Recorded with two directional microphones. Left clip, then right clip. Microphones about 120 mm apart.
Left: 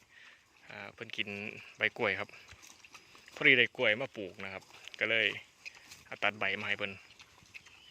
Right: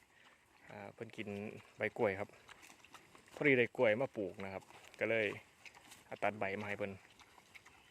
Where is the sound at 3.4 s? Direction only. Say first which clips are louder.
Left 6 dB; 20° right (ahead or behind).